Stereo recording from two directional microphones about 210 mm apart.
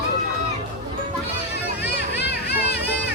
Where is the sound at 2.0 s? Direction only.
50° left (ahead or behind).